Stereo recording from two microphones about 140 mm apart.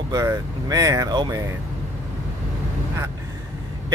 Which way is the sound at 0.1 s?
25° right (ahead or behind).